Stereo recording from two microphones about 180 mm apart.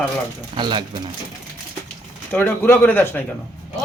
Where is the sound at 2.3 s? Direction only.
10° left (ahead or behind).